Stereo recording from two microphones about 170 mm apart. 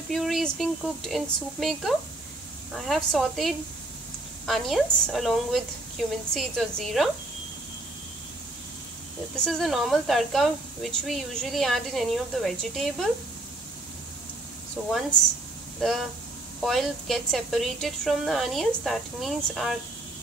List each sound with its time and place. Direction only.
0.1 s speech: centre (ahead or behind)
9.4 s speech: centre (ahead or behind)
14.8 s speech: 5° left (ahead or behind)